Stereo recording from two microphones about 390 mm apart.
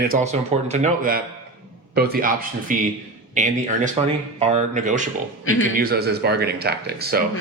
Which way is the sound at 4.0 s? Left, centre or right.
Centre.